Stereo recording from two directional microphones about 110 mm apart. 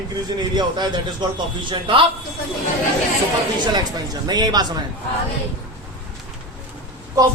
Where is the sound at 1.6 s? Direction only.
50° right (ahead or behind).